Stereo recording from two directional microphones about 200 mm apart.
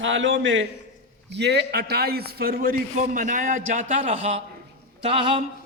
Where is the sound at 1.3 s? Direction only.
60° right (ahead or behind).